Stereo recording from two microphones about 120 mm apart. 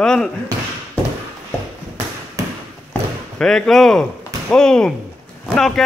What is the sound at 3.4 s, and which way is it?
Speech, centre (ahead or behind).